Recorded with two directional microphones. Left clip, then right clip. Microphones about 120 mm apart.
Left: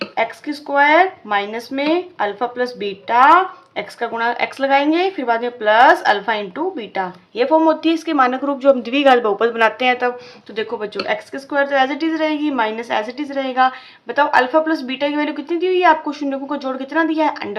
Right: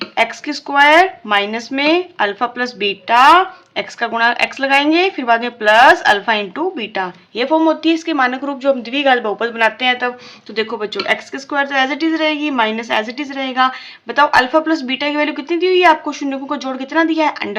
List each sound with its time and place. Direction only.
0.2 s speech: 35° right (ahead or behind); by 10.2 s 10° right (ahead or behind)
10.5 s speech: 30° right (ahead or behind)